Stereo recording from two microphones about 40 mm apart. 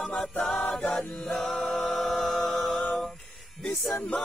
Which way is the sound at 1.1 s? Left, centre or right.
Centre.